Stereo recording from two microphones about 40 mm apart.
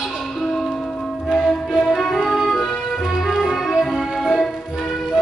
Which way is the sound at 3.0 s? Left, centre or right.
Centre.